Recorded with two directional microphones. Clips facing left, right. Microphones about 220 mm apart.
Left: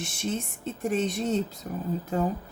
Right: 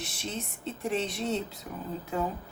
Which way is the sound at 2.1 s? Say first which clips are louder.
Left 3 dB; 40° left (ahead or behind).